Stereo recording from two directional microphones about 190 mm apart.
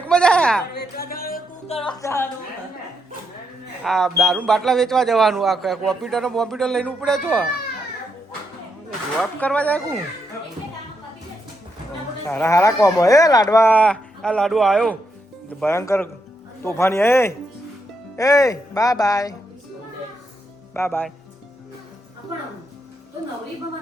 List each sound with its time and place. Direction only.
0.0 s a sound: 5° left (ahead or behind)
0.7 s speech: 55° left (ahead or behind)
2.0 s speech: 15° left (ahead or behind)
3.8 s speech: centre (ahead or behind)
9.4 s speech: 10° left (ahead or behind)
12.3 s speech: 15° left (ahead or behind)
15.6 s speech: 15° left (ahead or behind)
20.7 s speech: 10° left (ahead or behind)